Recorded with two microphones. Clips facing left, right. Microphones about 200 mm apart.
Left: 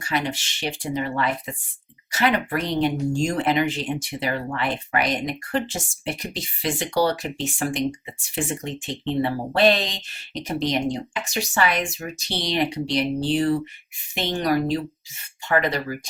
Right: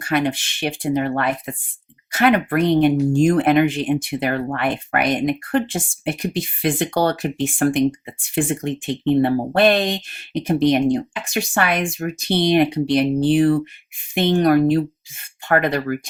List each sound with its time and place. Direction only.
0.0 s speech: 55° right (ahead or behind)